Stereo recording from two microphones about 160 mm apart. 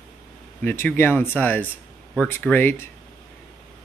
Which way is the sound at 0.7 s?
15° left (ahead or behind).